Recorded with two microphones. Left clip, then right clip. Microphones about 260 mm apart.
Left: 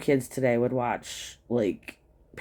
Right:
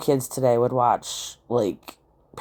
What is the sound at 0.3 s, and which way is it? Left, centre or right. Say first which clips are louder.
Speech: right 5 dB; right.